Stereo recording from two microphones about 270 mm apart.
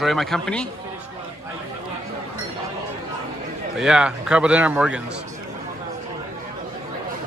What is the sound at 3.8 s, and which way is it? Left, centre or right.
A man's voice, centre.